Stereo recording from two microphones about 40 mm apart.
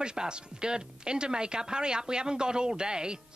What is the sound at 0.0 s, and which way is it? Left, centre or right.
Speech, right.